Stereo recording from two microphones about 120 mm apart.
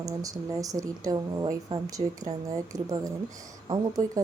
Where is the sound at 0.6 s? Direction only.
30° right (ahead or behind).